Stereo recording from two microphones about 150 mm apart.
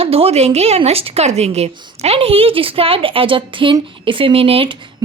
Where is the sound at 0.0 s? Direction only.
40° right (ahead or behind).